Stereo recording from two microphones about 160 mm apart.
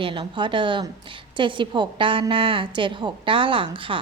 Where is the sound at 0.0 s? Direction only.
30° right (ahead or behind).